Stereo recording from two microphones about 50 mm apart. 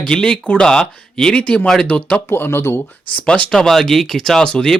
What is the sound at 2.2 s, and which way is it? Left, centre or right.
Speech, left.